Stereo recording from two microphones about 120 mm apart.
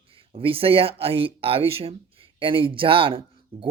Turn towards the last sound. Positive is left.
turn(degrees=-50)  # may be behind; listen again after turning